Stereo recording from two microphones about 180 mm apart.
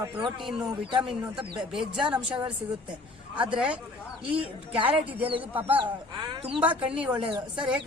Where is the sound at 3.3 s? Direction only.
5° right (ahead or behind).